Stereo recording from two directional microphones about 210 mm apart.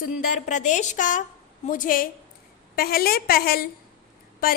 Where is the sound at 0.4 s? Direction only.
35° left (ahead or behind).